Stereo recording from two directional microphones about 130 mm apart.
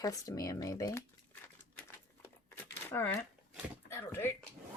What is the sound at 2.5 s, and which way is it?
Crumpling, 15° left (ahead or behind).